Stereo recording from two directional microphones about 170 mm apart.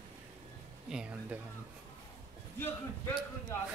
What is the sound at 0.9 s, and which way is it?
Speech, 5° right (ahead or behind).